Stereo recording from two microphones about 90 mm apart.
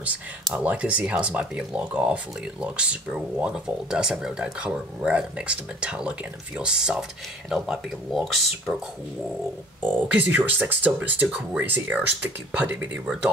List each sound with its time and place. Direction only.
0.6 s speech: 15° right (ahead or behind)
9.8 s speech: 20° right (ahead or behind)